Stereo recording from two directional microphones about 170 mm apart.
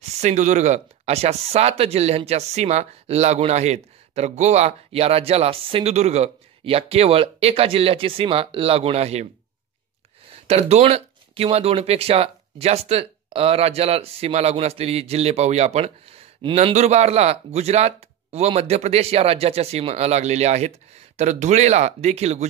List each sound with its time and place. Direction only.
0.2 s speech: 45° right (ahead or behind)
10.4 s speech: 35° right (ahead or behind)